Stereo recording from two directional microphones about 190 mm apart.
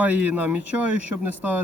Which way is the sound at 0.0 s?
10° right (ahead or behind).